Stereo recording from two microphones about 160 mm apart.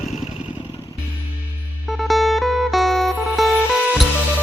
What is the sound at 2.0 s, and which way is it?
Music, centre (ahead or behind).